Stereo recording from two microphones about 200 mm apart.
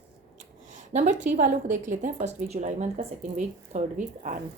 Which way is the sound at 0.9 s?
35° right (ahead or behind).